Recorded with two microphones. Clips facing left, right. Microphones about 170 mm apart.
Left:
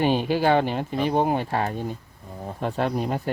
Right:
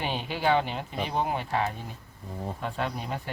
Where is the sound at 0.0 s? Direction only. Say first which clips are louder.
Left 8 dB; 45° left (ahead or behind).